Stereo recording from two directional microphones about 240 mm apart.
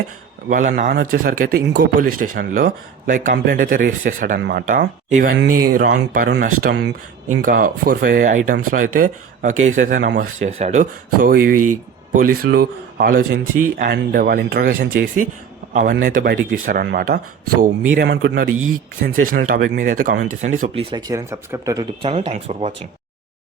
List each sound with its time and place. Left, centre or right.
0.4 s speech: right
10.0 s speech: right
10.4 s speech: right
11.5 s speech: right
12.1 s speech: right
20.9 s speech: centre